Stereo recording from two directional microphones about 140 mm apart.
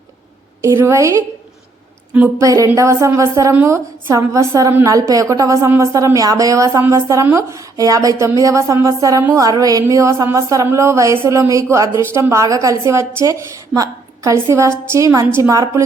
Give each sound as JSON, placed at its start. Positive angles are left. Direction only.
{"t": 0.6, "sound": "a woman's voice", "side_deg": -20}